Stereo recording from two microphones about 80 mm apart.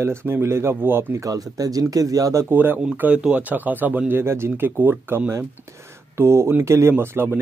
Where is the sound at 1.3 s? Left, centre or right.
Right.